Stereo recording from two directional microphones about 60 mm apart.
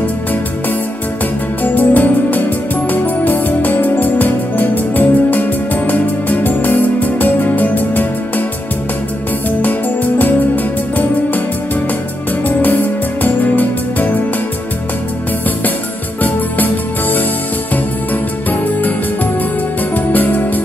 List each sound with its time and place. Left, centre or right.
1.6 s music: left
9.6 s music: left
13.2 s music: left
16.2 s music: left
20.1 s music: left